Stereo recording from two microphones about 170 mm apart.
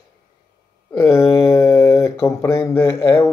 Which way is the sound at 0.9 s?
15° left (ahead or behind).